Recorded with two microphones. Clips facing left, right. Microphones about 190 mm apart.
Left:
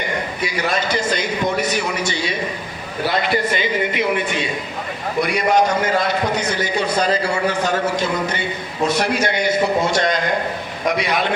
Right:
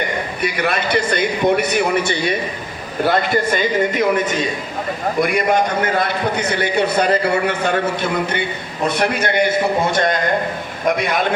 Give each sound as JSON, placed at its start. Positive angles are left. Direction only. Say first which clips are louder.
{"t": 0.4, "sound": "a man's voice", "louder": "right 2 dB", "side_deg": -60}
{"t": 5.2, "sound": "a man's voice", "louder": "even", "side_deg": -55}